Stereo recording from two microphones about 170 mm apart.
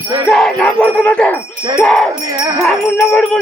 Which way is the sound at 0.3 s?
Centre (ahead or behind).